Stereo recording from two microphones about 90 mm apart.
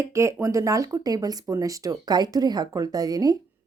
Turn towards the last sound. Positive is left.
turn(degrees=-45)  # may be behind; listen again after turning